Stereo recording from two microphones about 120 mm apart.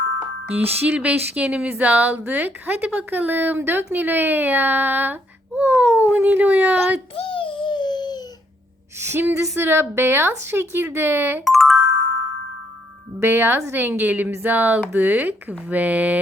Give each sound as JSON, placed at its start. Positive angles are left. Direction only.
{"t": 0.7, "sound": "speech", "side_deg": -15}
{"t": 7.2, "sound": "a sound", "side_deg": 50}
{"t": 9.0, "sound": "speech", "side_deg": -20}
{"t": 11.4, "sound": "music", "side_deg": 0}
{"t": 13.2, "sound": "speech", "side_deg": -20}